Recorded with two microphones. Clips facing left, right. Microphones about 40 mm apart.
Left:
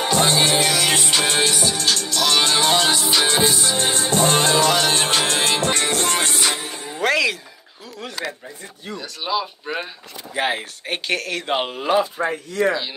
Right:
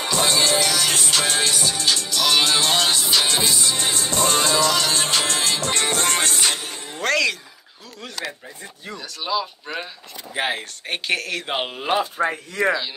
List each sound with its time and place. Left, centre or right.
0.0 s music: left
1.5 s music: centre
3.1 s music: left
3.6 s music: left
7.0 s music: centre
8.9 s speech: centre
12.2 s speech: right